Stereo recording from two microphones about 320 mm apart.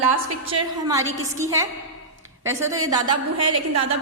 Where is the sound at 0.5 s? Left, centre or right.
Centre.